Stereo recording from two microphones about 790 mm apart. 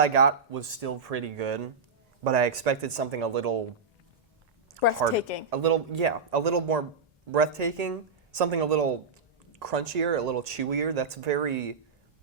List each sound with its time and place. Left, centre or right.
0.0 s speech: right
4.8 s a woman's voice: right